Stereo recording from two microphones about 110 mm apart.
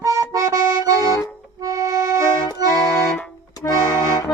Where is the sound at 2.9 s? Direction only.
10° left (ahead or behind).